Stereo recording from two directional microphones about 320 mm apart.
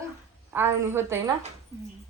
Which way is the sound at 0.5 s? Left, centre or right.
Centre.